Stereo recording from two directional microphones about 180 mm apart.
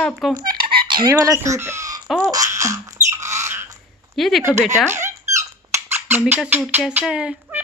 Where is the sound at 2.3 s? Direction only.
20° right (ahead or behind).